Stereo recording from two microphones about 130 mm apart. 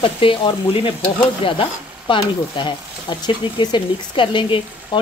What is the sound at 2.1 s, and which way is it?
Speech, 35° left (ahead or behind).